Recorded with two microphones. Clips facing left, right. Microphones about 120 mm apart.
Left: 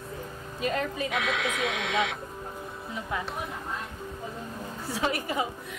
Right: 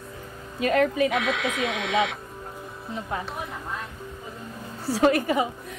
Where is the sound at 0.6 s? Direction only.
80° right.